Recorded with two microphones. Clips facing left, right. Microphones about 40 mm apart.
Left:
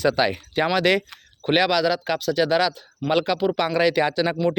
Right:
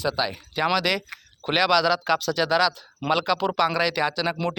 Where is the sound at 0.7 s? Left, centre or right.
Left.